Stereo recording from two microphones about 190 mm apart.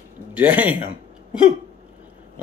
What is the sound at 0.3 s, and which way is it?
Speech, 10° right (ahead or behind).